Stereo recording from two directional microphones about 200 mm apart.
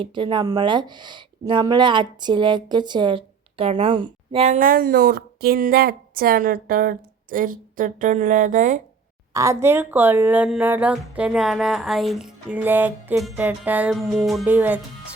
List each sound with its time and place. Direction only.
0.0 s speech: 25° right (ahead or behind); by 8.8 s 40° right (ahead or behind)
9.3 s speech: 15° right (ahead or behind)